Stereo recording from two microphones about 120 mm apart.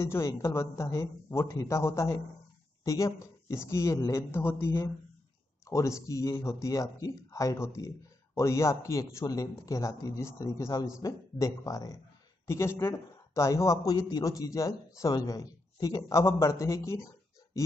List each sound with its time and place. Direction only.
0.0 s speech: 20° left (ahead or behind)